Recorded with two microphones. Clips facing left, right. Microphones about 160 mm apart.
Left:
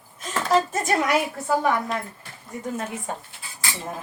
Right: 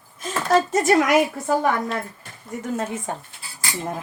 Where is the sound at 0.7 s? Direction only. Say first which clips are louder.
Right 5 dB; 90° right.